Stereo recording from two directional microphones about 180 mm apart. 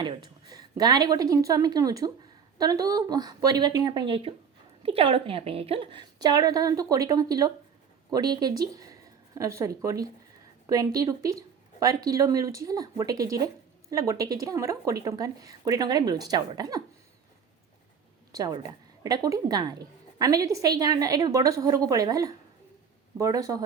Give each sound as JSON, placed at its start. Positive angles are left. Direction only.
{"t": 0.0, "sound": "speech", "side_deg": -25}
{"t": 18.3, "sound": "a woman's voice", "side_deg": -20}